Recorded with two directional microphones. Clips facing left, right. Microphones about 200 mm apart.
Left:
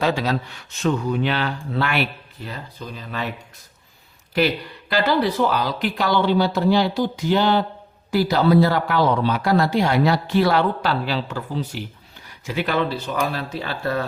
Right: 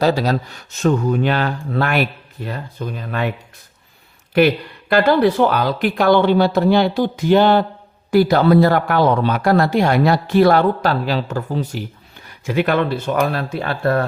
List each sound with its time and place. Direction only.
0.0 s speech: 40° right (ahead or behind); by 3.3 s 55° right (ahead or behind)
4.4 s speech: 55° right (ahead or behind)